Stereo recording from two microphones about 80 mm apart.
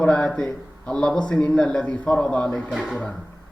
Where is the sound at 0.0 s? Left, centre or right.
Centre.